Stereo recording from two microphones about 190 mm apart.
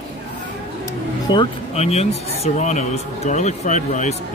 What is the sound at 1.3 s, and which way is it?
A man's voice, 30° left (ahead or behind).